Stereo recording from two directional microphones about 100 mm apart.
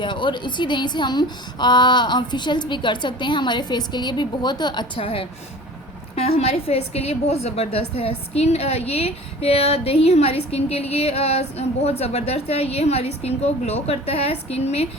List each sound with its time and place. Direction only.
0.0 s a woman's voice: 50° left (ahead or behind)
4.9 s a woman's voice: 70° left (ahead or behind)
6.1 s a woman's voice: 90° left